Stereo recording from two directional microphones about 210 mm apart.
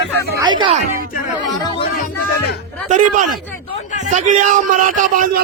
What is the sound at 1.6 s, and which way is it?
Music, 25° left (ahead or behind).